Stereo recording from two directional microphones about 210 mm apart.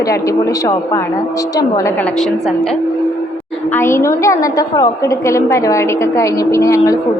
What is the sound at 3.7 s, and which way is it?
A woman's voice, 10° left (ahead or behind).